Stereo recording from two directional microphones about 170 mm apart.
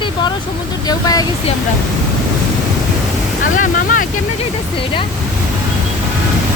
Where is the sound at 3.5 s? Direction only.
50° left (ahead or behind).